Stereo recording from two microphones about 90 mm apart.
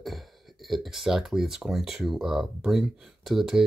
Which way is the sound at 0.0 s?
Centre (ahead or behind).